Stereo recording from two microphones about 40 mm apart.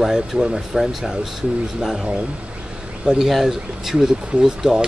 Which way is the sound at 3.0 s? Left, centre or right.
Centre.